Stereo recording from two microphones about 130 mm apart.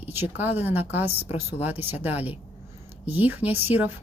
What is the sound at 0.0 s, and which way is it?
A woman's voice, 15° right (ahead or behind).